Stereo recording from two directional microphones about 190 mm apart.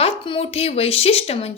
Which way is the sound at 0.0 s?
30° left (ahead or behind).